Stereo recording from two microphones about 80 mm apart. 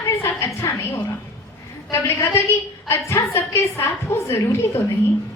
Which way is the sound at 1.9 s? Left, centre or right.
Left.